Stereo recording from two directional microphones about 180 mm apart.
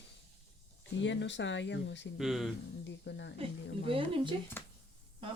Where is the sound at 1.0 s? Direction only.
90° left.